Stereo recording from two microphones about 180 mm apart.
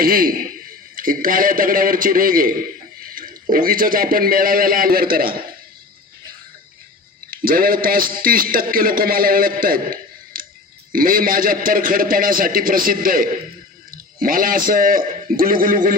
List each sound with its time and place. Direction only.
0.0 s a man's voice: 55° right (ahead or behind)
7.3 s a man's voice: 50° right (ahead or behind)